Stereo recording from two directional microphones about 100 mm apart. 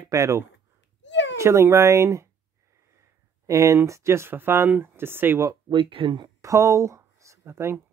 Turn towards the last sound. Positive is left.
turn(degrees=-25)  # may be behind; listen again after turning